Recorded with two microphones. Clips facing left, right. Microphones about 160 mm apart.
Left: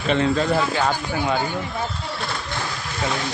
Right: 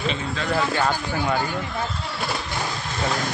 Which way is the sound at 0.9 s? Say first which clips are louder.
Left 1 dB; 15° left (ahead or behind).